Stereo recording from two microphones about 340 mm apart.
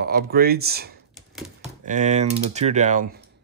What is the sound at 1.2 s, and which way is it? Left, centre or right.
Typewriter, centre.